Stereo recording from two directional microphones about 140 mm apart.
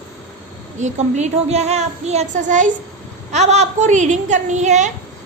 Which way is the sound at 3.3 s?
50° right (ahead or behind).